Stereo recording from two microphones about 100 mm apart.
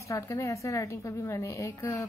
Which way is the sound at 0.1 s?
30° left (ahead or behind).